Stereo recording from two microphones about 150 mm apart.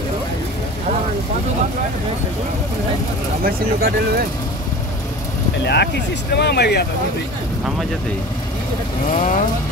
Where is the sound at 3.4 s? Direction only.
90° right.